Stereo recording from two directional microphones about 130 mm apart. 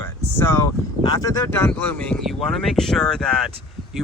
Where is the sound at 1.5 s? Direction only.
15° left (ahead or behind).